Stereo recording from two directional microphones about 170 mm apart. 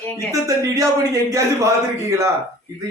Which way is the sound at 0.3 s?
20° right (ahead or behind).